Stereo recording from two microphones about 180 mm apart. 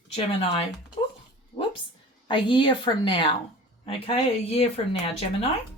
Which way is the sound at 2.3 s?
25° left (ahead or behind).